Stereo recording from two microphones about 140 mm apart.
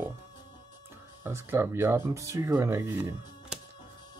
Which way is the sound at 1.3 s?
20° right (ahead or behind).